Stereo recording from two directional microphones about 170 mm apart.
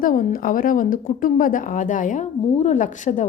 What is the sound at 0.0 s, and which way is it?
A woman's voice, 55° left (ahead or behind).